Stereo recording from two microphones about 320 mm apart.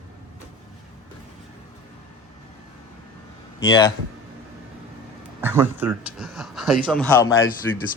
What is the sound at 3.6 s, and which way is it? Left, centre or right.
Speech, centre.